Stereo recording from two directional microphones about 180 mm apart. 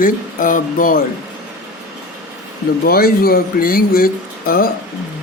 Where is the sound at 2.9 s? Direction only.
55° left (ahead or behind).